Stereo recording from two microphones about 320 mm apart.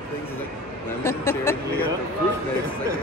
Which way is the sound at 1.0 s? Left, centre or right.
Centre.